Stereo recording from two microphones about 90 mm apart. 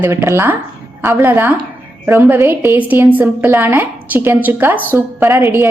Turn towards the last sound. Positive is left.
turn(degrees=-30)  # may be behind; listen again after turning